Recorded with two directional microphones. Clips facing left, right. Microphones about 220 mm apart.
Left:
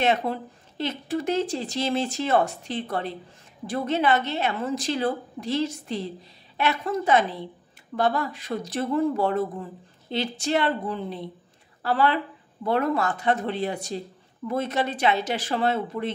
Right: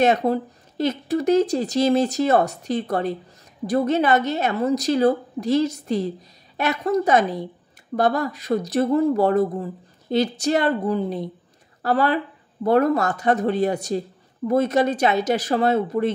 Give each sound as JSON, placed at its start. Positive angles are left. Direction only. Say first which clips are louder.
{"t": 0.0, "sound": "speech", "louder": "right 5 dB", "side_deg": -40}